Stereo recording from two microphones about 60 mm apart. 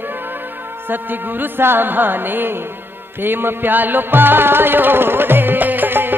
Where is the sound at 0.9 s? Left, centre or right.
Right.